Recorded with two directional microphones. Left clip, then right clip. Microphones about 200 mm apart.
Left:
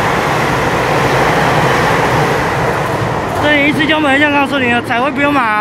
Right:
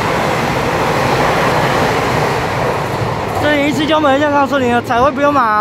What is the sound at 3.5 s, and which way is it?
Speech, 15° right (ahead or behind).